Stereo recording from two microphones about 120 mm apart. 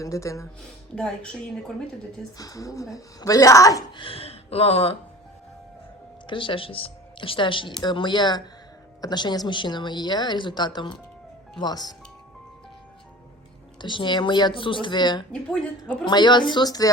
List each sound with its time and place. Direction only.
0.0 s speech: 25° left (ahead or behind)
0.9 s a woman's voice: 5° left (ahead or behind)
2.4 s speech: 30° left (ahead or behind)
3.9 s speech: 50° left (ahead or behind)
6.2 s speech: 45° left (ahead or behind)
13.8 s speech: 40° left (ahead or behind)